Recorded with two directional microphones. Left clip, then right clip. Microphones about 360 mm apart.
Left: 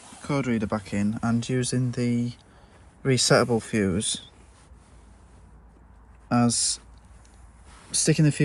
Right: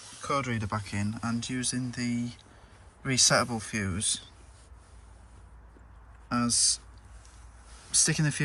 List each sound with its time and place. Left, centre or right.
0.2 s speech: centre
6.2 s speech: centre
7.9 s speech: centre